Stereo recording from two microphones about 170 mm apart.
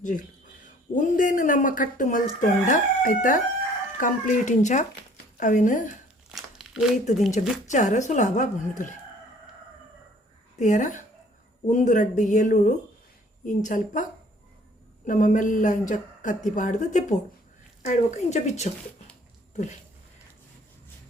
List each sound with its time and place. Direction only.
0.0 s speech: 50° left (ahead or behind)
6.2 s crumpling: centre (ahead or behind)
7.4 s speech: 45° left (ahead or behind)
10.6 s speech: 45° left (ahead or behind)